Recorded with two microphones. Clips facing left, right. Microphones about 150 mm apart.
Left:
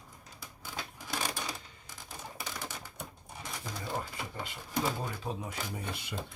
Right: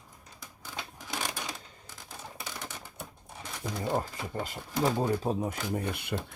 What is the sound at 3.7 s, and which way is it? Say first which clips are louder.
Speech: right 7 dB; 50° right (ahead or behind).